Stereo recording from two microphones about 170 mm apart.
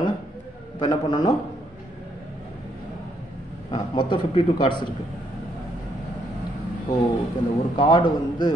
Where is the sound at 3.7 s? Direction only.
30° left (ahead or behind).